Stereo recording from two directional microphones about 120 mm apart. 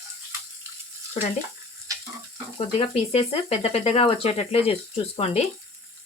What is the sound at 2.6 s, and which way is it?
Speech, 55° left (ahead or behind).